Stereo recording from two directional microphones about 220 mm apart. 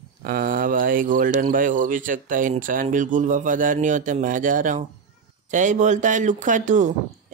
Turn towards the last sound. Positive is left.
turn(degrees=-35)  # may be behind; listen again after turning